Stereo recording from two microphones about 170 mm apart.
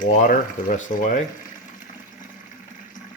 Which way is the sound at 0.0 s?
50° left (ahead or behind).